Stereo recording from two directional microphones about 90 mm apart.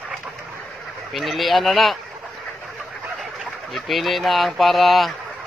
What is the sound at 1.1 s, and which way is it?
Speech, centre (ahead or behind).